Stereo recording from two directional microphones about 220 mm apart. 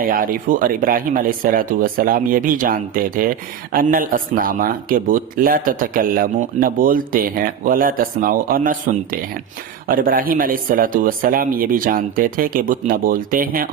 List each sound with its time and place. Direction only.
0.0 s speech: 40° right (ahead or behind)